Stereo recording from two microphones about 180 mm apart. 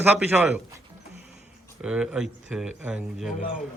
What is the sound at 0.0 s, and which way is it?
Speech, 10° right (ahead or behind).